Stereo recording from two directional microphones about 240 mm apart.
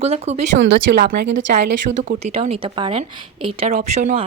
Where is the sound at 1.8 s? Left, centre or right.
Right.